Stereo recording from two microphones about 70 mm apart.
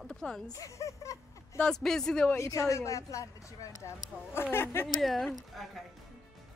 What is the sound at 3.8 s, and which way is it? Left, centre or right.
Speech, left.